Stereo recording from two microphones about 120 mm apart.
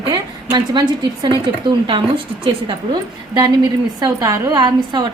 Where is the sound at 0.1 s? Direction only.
35° right (ahead or behind).